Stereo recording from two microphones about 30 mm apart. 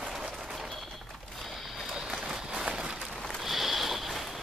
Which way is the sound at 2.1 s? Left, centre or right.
Right.